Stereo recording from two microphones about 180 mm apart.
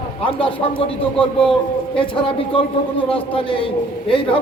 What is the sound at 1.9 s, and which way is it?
A man's voice, 30° left (ahead or behind).